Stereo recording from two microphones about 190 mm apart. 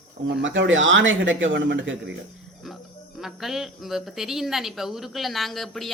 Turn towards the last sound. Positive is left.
turn(degrees=0)  # may be behind; listen again after turning